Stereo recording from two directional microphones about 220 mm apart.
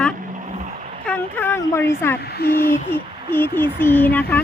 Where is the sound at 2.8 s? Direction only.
10° left (ahead or behind).